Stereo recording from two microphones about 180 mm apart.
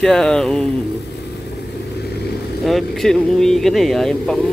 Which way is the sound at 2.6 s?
Centre (ahead or behind).